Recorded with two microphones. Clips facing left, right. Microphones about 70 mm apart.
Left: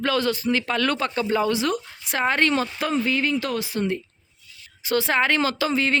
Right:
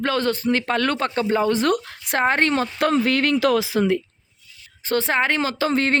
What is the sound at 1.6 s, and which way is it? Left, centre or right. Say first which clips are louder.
Speech: right 4 dB; right.